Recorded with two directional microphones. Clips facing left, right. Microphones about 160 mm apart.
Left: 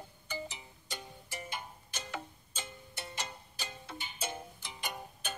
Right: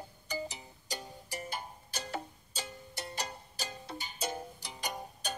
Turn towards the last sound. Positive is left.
turn(degrees=-40)  # may be behind; listen again after turning